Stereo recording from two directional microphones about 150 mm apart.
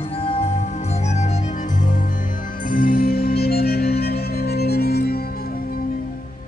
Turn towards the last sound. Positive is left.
turn(degrees=90)